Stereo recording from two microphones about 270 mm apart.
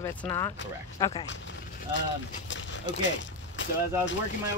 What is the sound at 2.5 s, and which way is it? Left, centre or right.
Speech, left.